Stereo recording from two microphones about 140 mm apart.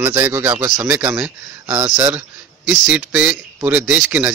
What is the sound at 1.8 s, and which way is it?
Speech, 25° right (ahead or behind).